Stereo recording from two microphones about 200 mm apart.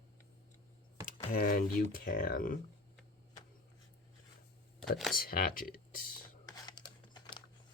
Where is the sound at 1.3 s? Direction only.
45° left (ahead or behind).